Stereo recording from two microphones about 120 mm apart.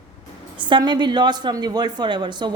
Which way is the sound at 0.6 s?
40° right (ahead or behind).